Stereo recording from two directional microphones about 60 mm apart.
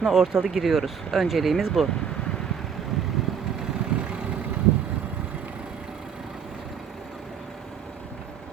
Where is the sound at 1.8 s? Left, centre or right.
Centre.